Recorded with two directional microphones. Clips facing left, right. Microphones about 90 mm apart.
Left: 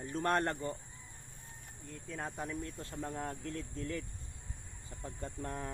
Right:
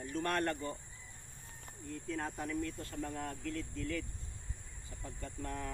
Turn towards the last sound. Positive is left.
turn(degrees=30)  # may be behind; listen again after turning